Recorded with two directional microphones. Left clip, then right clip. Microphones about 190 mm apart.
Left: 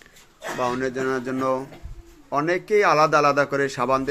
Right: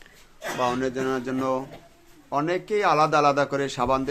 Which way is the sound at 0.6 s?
5° left (ahead or behind).